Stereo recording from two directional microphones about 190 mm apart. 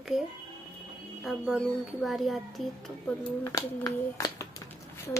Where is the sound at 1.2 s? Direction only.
5° right (ahead or behind).